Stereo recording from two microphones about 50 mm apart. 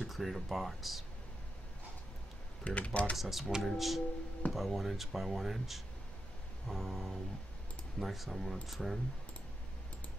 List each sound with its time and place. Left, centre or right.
0.0 s speech: centre
2.6 s speech: left
3.2 s speech: centre